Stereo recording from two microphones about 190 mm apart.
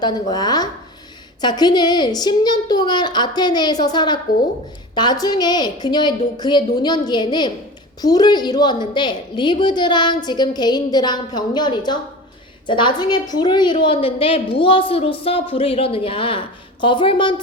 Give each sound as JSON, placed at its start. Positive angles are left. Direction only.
{"t": 0.0, "sound": "a woman's voice", "side_deg": 20}
{"t": 5.2, "sound": "a woman's voice", "side_deg": 20}